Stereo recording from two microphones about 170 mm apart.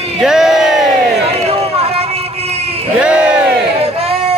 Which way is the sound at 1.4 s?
35° right (ahead or behind).